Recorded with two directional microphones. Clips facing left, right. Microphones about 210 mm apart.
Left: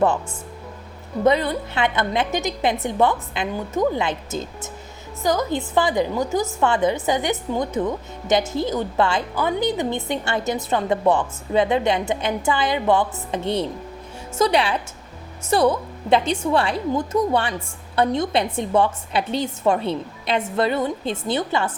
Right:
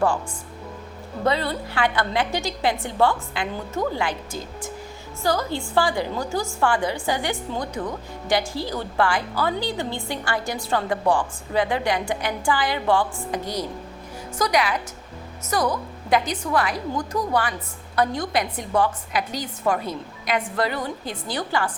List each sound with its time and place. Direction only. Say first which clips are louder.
1.2 s a woman's voice: left 5 dB; 20° left (ahead or behind)